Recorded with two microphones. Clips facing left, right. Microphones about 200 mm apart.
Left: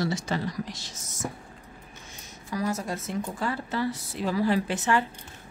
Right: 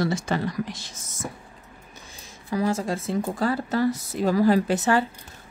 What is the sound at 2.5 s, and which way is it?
A woman's voice, 30° right (ahead or behind).